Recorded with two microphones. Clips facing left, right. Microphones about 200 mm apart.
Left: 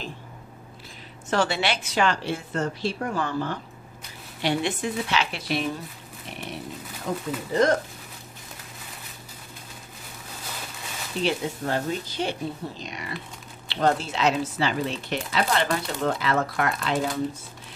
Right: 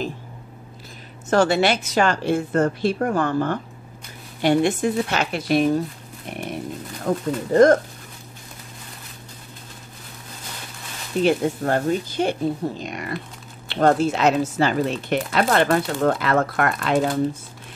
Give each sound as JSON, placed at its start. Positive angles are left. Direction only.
{"t": 1.3, "sound": "speech", "side_deg": -45}
{"t": 6.3, "sound": "a sound", "side_deg": -50}
{"t": 7.1, "sound": "speech", "side_deg": -50}
{"t": 11.2, "sound": "speech", "side_deg": -50}